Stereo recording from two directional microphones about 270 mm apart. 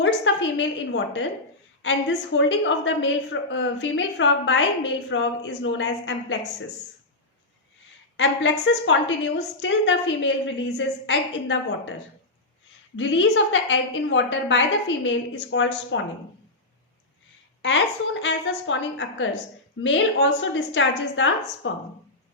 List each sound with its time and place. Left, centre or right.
0.0 s a woman's voice: left
8.1 s a woman's voice: left
13.0 s a woman's voice: left
17.6 s a woman's voice: left